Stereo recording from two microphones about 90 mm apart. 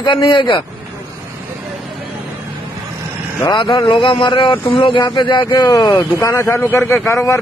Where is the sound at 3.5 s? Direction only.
55° left (ahead or behind).